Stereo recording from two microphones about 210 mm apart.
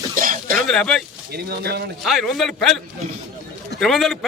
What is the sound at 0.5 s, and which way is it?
Speech, centre (ahead or behind).